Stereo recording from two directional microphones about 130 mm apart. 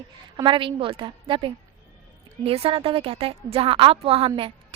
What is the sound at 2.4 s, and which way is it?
A woman's voice, 50° right (ahead or behind).